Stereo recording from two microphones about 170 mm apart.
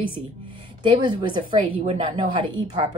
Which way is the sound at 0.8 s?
25° right (ahead or behind).